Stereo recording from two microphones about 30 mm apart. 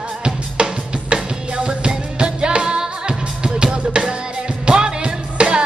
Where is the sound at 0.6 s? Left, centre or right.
Right.